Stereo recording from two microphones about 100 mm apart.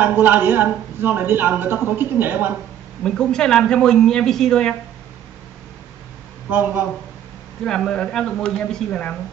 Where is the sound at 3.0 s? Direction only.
5° left (ahead or behind).